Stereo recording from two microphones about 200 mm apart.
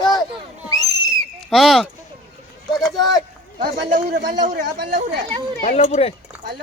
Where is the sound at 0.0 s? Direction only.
20° left (ahead or behind).